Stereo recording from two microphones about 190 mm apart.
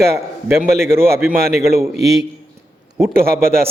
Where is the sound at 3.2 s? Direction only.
55° right (ahead or behind).